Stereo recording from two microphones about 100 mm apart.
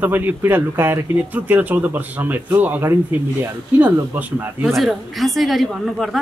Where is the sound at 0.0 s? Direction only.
15° right (ahead or behind).